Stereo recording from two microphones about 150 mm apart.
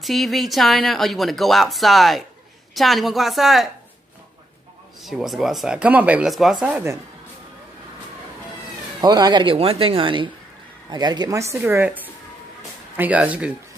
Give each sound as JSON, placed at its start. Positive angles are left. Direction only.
{"t": 0.0, "sound": "speech", "side_deg": 0}
{"t": 5.0, "sound": "speech", "side_deg": 0}
{"t": 9.0, "sound": "a woman's voice", "side_deg": -25}